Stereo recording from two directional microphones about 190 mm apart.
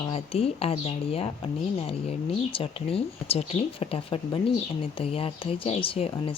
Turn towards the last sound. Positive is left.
turn(degrees=30)  # may be behind; listen again after turning